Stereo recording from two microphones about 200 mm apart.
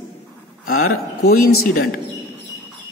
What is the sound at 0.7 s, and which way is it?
Speech, 50° left (ahead or behind).